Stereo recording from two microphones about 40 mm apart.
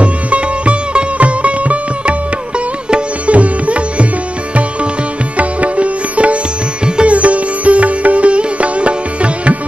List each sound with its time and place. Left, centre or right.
0.0 s sitar: right
3.3 s sitar: right
5.4 s sitar: right